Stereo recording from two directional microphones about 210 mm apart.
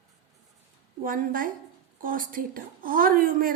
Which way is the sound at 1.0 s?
40° right (ahead or behind).